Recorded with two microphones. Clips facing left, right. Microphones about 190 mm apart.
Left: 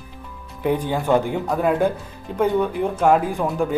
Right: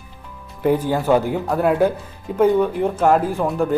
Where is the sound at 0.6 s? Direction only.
5° right (ahead or behind).